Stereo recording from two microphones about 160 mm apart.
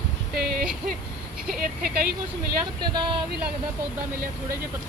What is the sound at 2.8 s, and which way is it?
Speech, 25° right (ahead or behind).